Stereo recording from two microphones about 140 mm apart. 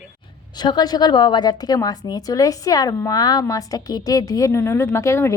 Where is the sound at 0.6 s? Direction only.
30° left (ahead or behind).